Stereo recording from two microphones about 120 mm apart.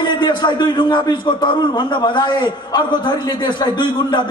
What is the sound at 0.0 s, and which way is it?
A man's voice, 40° left (ahead or behind).